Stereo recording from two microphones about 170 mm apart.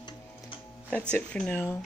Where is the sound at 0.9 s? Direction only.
5° left (ahead or behind).